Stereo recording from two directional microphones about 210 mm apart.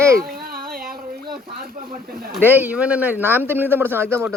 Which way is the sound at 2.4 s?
10° right (ahead or behind).